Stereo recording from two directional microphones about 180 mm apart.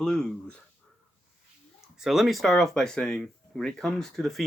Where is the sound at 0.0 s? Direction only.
5° left (ahead or behind).